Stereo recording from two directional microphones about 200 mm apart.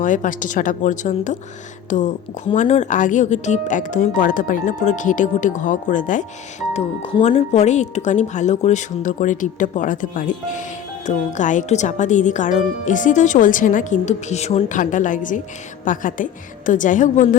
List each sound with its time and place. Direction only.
0.0 s speech: 40° left (ahead or behind)